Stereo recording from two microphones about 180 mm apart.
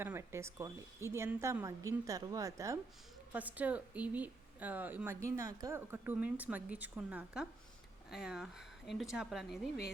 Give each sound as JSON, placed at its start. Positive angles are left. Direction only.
{"t": 0.0, "sound": "a woman's voice", "side_deg": -15}